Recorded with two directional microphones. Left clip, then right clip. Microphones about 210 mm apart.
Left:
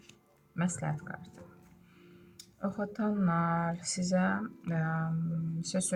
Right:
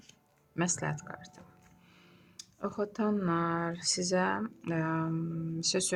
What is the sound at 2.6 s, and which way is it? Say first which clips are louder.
Speech: right 2 dB; 50° right (ahead or behind).